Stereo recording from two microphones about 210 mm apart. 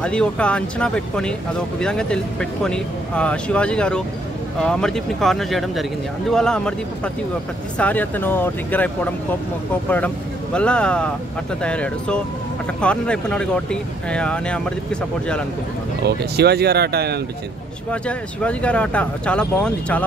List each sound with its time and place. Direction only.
0.0 s speech: 5° left (ahead or behind)
7.7 s speech: 5° left (ahead or behind)
16.3 s speech: 50° right (ahead or behind)
18.0 s speech: 5° left (ahead or behind)